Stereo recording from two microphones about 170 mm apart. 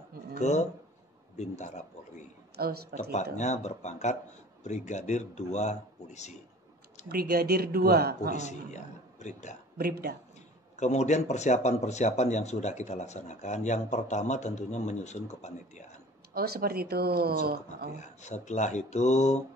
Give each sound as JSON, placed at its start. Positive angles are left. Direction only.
{"t": 0.3, "sound": "speech", "side_deg": 45}
{"t": 2.5, "sound": "speech", "side_deg": -65}
{"t": 3.0, "sound": "speech", "side_deg": 45}
{"t": 7.1, "sound": "speech", "side_deg": -65}
{"t": 8.4, "sound": "speech", "side_deg": 45}
{"t": 9.8, "sound": "speech", "side_deg": -65}
{"t": 10.8, "sound": "speech", "side_deg": 40}
{"t": 16.3, "sound": "speech", "side_deg": -65}
{"t": 17.9, "sound": "speech", "side_deg": 45}